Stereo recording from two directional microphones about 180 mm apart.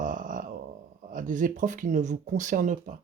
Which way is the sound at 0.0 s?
45° right (ahead or behind).